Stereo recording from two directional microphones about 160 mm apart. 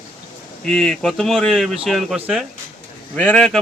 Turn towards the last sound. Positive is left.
turn(degrees=5)  # may be behind; listen again after turning